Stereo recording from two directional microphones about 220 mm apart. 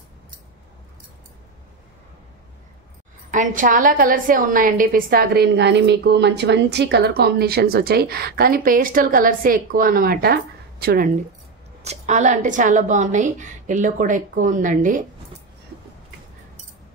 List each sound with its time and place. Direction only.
3.3 s a woman's voice: 35° right (ahead or behind)
11.8 s a woman's voice: 30° right (ahead or behind)